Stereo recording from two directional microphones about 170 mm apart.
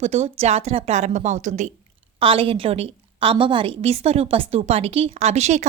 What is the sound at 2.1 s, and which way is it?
A woman's voice, 30° right (ahead or behind).